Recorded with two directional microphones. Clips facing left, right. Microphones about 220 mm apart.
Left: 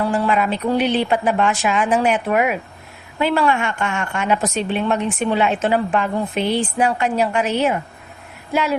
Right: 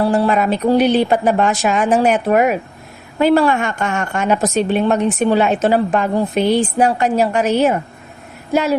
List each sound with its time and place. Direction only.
0.0 s a woman's voice: 35° right (ahead or behind)
8.5 s female singing: 40° right (ahead or behind)